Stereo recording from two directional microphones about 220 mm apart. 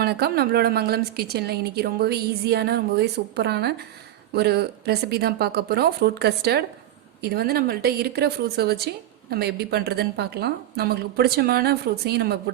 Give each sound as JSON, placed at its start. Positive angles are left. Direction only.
{"t": 0.0, "sound": "a woman's voice", "side_deg": -45}